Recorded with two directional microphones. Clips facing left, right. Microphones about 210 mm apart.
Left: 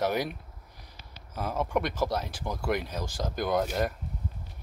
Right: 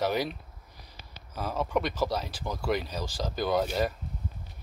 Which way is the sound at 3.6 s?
Centre (ahead or behind).